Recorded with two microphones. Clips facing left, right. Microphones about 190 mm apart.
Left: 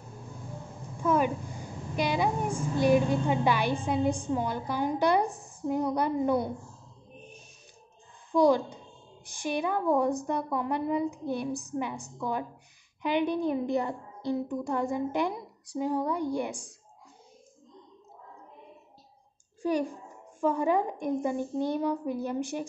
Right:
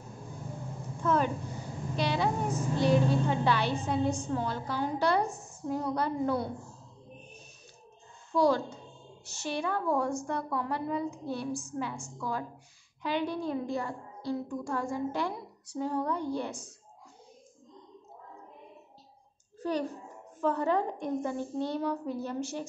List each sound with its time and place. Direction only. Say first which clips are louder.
1.0 s a sound: left 2 dB; 10° left (ahead or behind)
2.0 s a woman's voice: left 2 dB; 15° left (ahead or behind)
8.3 s a child's voice: left 3 dB; 15° left (ahead or behind)
19.6 s a child's voice: left 3 dB; 10° left (ahead or behind)